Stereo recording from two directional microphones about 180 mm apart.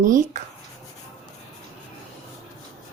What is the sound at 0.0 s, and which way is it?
Speech, 45° right (ahead or behind).